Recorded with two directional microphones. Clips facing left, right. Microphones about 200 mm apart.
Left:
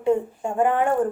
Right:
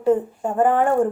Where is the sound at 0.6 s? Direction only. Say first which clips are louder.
Right 3 dB; 35° right (ahead or behind).